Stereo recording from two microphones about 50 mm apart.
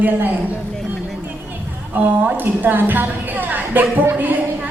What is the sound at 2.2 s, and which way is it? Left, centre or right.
A woman's voice, right.